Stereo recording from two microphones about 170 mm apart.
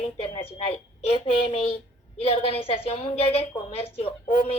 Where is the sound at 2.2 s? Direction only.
35° left (ahead or behind).